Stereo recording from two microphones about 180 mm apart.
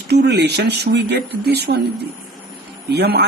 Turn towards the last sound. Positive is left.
turn(degrees=-65)  # may be behind; listen again after turning